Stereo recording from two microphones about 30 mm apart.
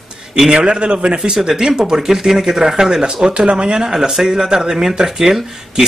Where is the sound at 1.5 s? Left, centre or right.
Centre.